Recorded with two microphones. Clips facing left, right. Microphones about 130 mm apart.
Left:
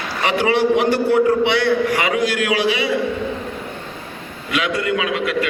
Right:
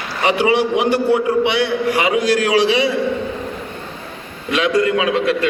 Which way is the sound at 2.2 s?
35° right (ahead or behind).